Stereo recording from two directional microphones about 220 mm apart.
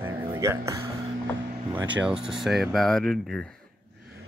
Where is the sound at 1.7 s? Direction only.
5° right (ahead or behind).